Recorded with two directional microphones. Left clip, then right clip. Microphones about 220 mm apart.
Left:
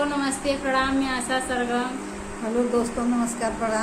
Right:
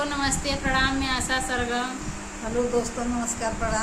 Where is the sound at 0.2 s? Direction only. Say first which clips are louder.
Left 1 dB; 20° right (ahead or behind).